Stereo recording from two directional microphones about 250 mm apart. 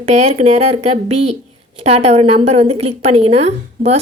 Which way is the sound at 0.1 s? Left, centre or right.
Right.